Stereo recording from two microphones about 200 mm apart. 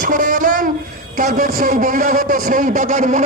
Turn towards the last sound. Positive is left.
turn(degrees=-40)  # may be behind; listen again after turning